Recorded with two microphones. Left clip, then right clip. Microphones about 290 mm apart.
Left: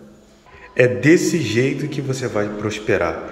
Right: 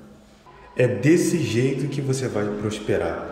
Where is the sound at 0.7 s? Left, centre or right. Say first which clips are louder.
Left 5 dB; centre.